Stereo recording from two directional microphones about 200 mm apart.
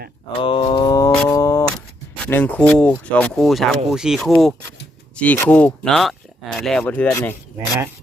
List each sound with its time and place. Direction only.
0.4 s a sound: 25° left (ahead or behind)
1.3 s camera: 15° left (ahead or behind)
2.2 s speech: 10° left (ahead or behind)